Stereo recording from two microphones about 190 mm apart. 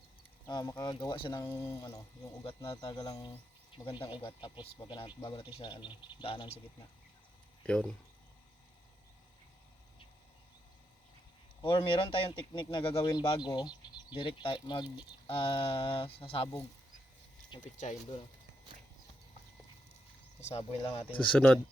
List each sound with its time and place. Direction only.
0.4 s speech: 20° left (ahead or behind)
2.4 s speech: 25° left (ahead or behind)
7.7 s speech: 5° left (ahead or behind)
12.1 s speech: 25° left (ahead or behind)
17.6 s speech: 40° left (ahead or behind)
20.4 s speech: 35° left (ahead or behind)
21.2 s speech: 5° left (ahead or behind)